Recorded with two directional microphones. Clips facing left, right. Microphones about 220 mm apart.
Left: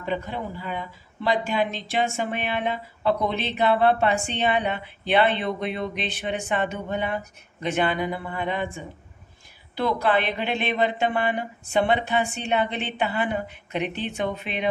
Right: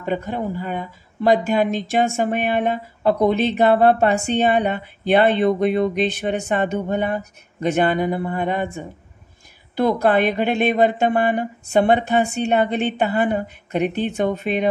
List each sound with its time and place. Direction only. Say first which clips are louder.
0.0 s speech: right 5 dB; 45° right (ahead or behind)